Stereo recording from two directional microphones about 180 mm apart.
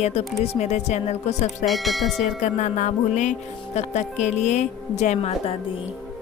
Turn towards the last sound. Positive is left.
turn(degrees=35)  # may be behind; listen again after turning